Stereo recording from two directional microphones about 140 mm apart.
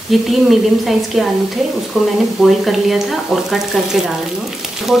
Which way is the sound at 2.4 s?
Centre (ahead or behind).